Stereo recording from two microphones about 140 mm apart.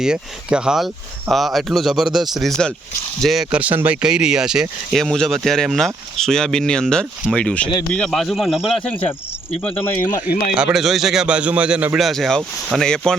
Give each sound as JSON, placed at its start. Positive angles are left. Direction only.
{"t": 0.0, "sound": "speech", "side_deg": -5}
{"t": 10.2, "sound": "a man's voice", "side_deg": -5}